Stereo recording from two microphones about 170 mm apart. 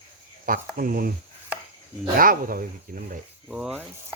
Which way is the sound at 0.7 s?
60° right (ahead or behind).